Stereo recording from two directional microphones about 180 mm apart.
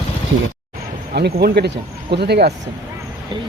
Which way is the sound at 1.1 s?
65° right (ahead or behind).